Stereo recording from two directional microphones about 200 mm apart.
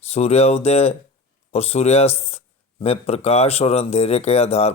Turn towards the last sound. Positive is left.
turn(degrees=30)  # may be behind; listen again after turning